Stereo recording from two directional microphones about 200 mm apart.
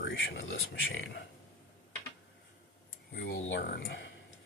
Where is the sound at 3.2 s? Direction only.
65° left (ahead or behind).